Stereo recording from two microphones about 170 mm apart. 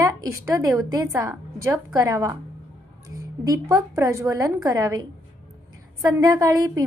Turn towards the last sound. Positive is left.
turn(degrees=-20)  # may be behind; listen again after turning